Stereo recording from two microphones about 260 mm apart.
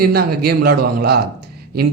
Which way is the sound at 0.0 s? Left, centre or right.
Right.